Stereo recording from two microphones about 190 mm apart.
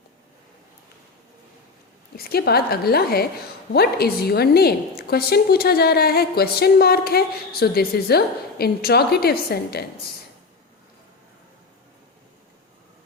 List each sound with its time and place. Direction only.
2.1 s a woman's voice: 55° left (ahead or behind)